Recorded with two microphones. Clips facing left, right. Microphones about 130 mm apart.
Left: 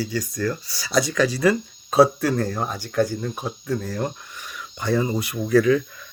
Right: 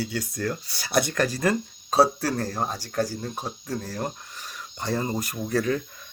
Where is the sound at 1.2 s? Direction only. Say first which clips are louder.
Left 5 dB; 45° right (ahead or behind).